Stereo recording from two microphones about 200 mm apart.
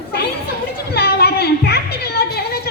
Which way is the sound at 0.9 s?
50° left (ahead or behind).